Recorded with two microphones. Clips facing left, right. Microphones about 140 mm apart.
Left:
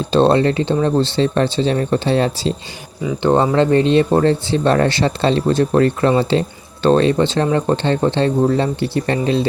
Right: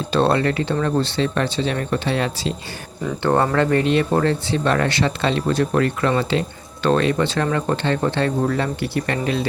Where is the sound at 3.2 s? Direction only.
20° left (ahead or behind).